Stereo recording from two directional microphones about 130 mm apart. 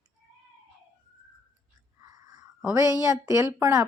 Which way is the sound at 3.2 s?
20° right (ahead or behind).